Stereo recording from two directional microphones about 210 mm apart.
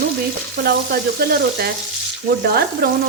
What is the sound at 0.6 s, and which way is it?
A woman's voice, 50° right (ahead or behind).